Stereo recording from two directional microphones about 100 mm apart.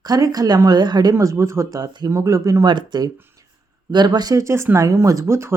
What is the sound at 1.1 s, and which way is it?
Speech, 30° right (ahead or behind).